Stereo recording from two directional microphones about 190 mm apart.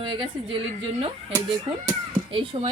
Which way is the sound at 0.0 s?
25° right (ahead or behind).